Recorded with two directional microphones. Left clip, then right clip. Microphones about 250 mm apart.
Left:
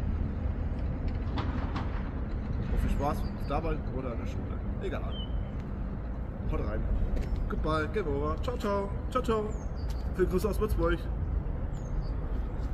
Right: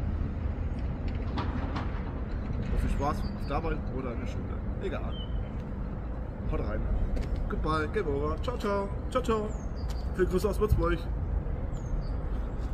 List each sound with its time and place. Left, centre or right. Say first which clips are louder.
2.9 s speech: right 1 dB; centre
6.5 s speech: right 1 dB; centre